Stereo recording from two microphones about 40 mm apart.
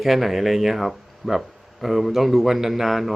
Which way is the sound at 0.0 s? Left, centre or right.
Centre.